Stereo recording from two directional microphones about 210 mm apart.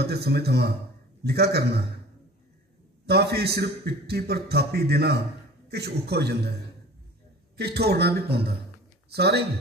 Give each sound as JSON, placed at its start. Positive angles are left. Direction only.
{"t": 0.0, "sound": "a man's voice", "side_deg": -50}
{"t": 3.1, "sound": "a man's voice", "side_deg": -50}
{"t": 7.5, "sound": "a man's voice", "side_deg": -50}